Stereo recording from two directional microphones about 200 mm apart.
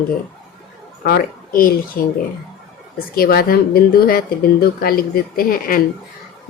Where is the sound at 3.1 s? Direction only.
50° left (ahead or behind).